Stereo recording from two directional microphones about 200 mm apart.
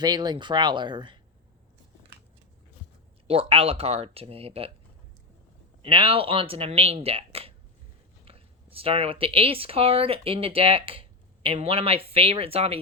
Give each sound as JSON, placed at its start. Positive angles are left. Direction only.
{"t": 0.0, "sound": "speech", "side_deg": -20}
{"t": 3.2, "sound": "speech", "side_deg": -30}
{"t": 5.8, "sound": "speech", "side_deg": -25}